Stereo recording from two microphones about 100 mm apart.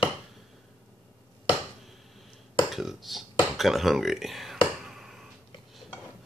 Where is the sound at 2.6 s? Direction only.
Centre (ahead or behind).